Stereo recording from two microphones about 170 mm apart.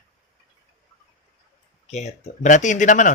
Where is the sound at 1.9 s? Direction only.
40° left (ahead or behind).